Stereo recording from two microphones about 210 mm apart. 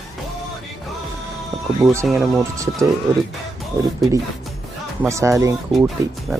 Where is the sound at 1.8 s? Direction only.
15° right (ahead or behind).